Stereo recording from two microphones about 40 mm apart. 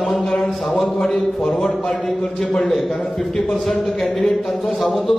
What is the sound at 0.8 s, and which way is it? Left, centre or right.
Speech, centre.